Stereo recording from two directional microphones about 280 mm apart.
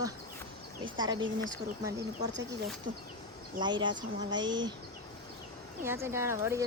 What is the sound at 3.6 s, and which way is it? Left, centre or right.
Speech, centre.